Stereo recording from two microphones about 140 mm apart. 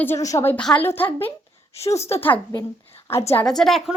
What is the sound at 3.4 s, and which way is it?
Speech, 5° left (ahead or behind).